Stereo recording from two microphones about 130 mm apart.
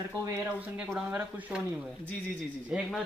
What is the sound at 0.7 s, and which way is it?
Speech, 10° right (ahead or behind).